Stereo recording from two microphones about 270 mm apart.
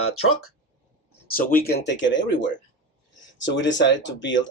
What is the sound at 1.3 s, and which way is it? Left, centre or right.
Speech, left.